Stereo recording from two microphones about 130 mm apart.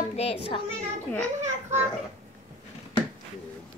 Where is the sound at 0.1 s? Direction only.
50° left (ahead or behind).